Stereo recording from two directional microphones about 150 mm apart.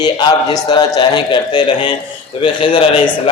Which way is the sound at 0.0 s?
25° left (ahead or behind).